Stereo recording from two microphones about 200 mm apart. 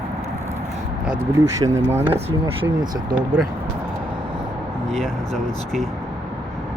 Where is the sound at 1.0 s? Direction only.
5° right (ahead or behind).